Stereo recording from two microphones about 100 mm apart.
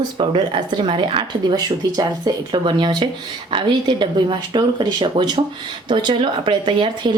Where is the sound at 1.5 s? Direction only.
40° right (ahead or behind).